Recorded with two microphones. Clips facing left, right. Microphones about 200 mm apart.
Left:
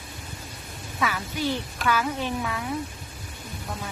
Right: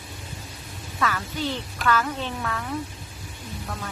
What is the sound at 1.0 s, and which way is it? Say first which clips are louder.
Speech: even; 10° left (ahead or behind).